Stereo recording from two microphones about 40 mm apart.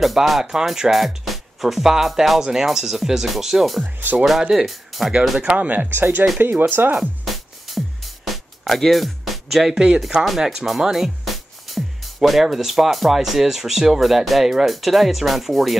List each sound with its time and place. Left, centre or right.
0.0 s speech: centre
3.8 s speech: right
4.2 s speech: centre
4.6 s speech: centre
5.4 s speech: right
5.9 s speech: right
7.6 s music: centre
9.8 s speech: centre